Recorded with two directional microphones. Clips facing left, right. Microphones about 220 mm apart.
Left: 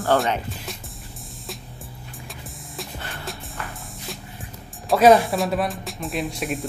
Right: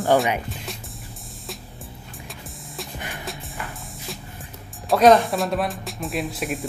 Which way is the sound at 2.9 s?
15° right (ahead or behind).